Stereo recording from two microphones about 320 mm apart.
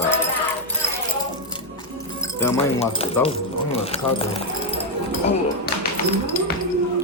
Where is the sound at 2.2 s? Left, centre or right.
Centre.